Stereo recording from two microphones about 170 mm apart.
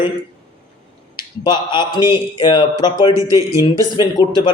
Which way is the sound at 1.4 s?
25° left (ahead or behind).